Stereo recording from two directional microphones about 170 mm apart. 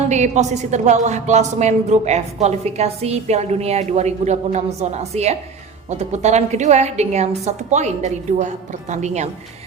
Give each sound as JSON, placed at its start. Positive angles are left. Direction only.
{"t": 0.1, "sound": "speech", "side_deg": -45}